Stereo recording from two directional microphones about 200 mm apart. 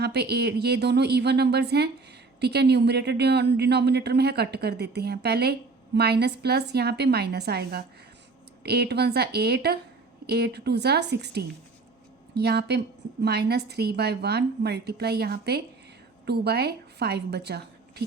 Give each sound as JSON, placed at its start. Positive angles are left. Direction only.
{"t": 0.0, "sound": "a woman's voice", "side_deg": -55}